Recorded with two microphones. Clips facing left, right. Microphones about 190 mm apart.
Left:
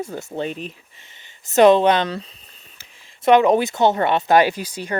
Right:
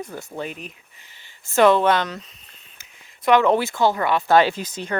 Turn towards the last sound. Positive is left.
turn(degrees=10)  # may be behind; listen again after turning